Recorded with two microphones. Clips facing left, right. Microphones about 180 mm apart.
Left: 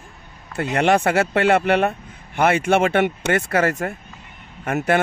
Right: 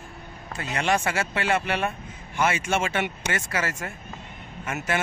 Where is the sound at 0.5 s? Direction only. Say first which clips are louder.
Left 7 dB; 60° left (ahead or behind).